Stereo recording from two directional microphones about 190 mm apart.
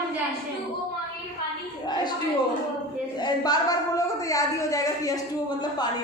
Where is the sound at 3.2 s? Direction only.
20° left (ahead or behind).